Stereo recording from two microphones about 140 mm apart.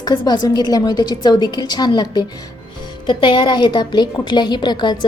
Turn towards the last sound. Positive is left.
turn(degrees=30)  # may be behind; listen again after turning